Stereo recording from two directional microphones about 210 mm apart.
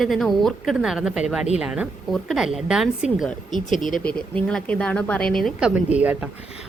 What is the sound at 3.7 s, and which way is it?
Speech, 40° left (ahead or behind).